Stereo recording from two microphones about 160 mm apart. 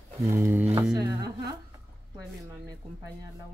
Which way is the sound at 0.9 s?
25° right (ahead or behind).